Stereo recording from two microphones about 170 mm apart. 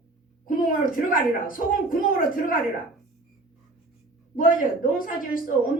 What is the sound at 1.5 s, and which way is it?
Speech, 55° left (ahead or behind).